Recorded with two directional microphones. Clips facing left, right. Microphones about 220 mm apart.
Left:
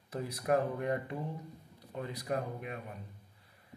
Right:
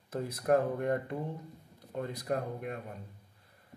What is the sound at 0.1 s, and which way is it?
Speech, 50° right (ahead or behind).